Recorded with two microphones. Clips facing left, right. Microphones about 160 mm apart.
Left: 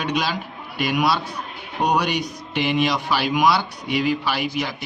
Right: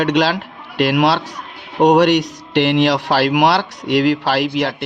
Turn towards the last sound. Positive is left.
turn(degrees=-65)  # may be behind; listen again after turning